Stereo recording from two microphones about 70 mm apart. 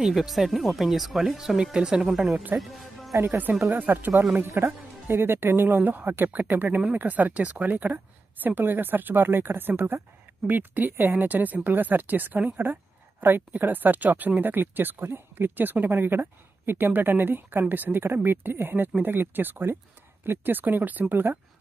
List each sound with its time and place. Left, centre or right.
0.0 s speech: centre
3.3 s speech: right
4.1 s speech: centre
5.0 s speech: right